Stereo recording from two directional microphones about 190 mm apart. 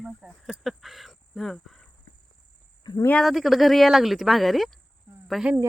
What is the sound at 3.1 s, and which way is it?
Speech, centre (ahead or behind).